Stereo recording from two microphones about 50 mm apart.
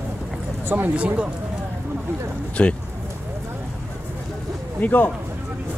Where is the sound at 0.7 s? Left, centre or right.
Right.